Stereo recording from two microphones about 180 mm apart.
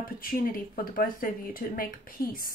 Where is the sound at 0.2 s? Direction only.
55° left (ahead or behind).